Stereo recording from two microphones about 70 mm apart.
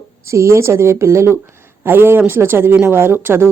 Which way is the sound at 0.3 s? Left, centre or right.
Right.